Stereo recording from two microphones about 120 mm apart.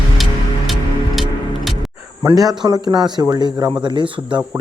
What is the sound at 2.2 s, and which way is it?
Speech, 30° right (ahead or behind).